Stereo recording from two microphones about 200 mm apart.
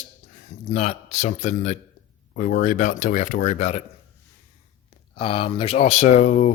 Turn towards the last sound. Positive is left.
turn(degrees=35)  # may be behind; listen again after turning